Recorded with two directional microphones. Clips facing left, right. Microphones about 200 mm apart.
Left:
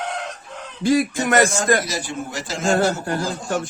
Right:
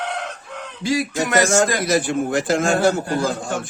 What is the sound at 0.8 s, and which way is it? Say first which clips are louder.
Speech: left 4 dB; 55° left (ahead or behind).